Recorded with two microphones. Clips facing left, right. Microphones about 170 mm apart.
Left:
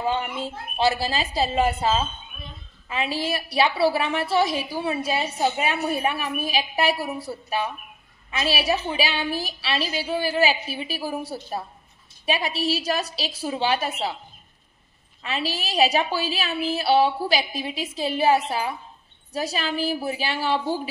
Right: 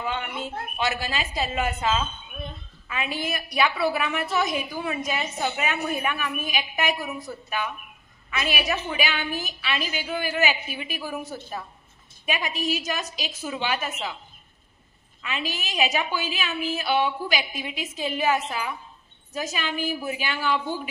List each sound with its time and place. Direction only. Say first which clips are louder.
0.0 s a woman's voice: left 4 dB; 35° left (ahead or behind)
15.2 s a woman's voice: left 3 dB; 35° left (ahead or behind)